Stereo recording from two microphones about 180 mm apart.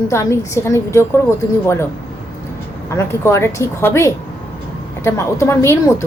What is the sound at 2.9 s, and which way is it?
Speech, 15° left (ahead or behind).